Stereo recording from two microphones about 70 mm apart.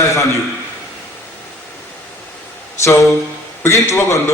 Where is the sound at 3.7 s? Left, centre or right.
Left.